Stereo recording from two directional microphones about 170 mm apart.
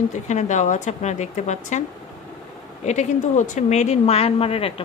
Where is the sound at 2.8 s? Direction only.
45° left (ahead or behind).